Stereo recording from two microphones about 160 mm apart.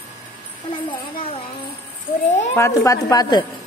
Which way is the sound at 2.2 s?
50° left (ahead or behind).